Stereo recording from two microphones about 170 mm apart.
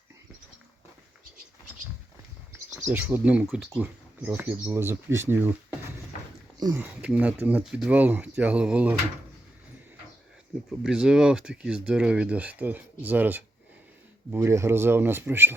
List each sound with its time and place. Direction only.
2.8 s speech: 10° right (ahead or behind)
6.7 s speech: 10° right (ahead or behind)
10.7 s speech: 5° right (ahead or behind)